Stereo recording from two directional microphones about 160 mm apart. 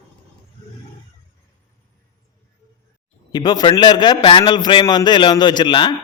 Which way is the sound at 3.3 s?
25° left (ahead or behind).